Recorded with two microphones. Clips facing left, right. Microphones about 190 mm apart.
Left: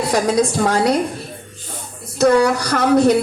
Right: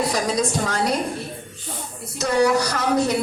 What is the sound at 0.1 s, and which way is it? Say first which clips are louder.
Speech: left 6 dB; 65° left (ahead or behind).